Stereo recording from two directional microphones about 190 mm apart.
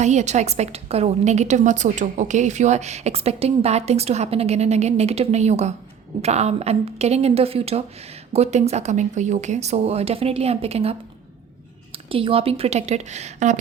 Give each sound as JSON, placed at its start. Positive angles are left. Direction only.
{"t": 0.0, "sound": "a woman's voice", "side_deg": -40}